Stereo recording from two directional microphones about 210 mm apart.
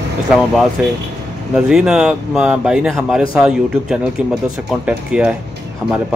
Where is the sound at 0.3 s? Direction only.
5° right (ahead or behind).